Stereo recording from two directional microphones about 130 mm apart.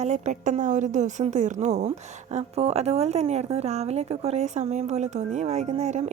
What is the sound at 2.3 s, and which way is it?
A woman's voice, 55° right (ahead or behind).